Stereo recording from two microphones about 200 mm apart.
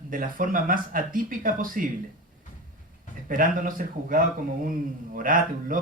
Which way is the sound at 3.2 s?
40° right (ahead or behind).